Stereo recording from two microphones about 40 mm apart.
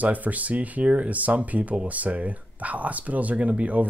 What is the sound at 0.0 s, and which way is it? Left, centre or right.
Speech, right.